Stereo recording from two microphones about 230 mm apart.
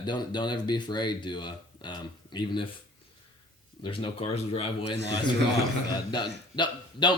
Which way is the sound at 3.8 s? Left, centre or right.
Left.